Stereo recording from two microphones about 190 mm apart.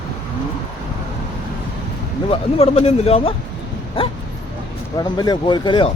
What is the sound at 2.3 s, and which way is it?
Speech, 30° left (ahead or behind).